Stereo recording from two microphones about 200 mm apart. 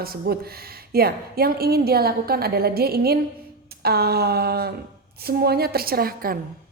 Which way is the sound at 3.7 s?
50° right (ahead or behind).